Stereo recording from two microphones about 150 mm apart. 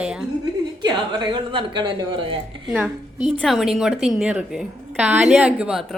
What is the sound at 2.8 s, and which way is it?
A woman's voice, centre (ahead or behind).